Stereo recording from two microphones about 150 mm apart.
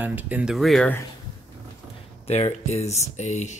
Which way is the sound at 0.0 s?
10° right (ahead or behind).